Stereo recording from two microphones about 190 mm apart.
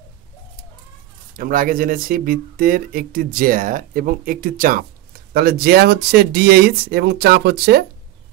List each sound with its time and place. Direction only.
1.3 s speech: 45° right (ahead or behind)